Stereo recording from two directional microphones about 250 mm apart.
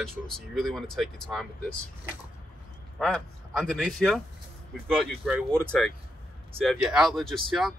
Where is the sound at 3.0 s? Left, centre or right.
Centre.